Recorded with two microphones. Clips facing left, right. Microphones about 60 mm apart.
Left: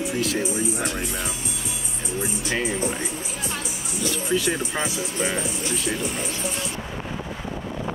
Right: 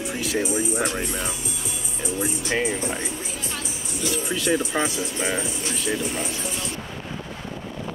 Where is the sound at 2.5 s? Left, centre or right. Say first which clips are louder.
Right 2 dB; centre.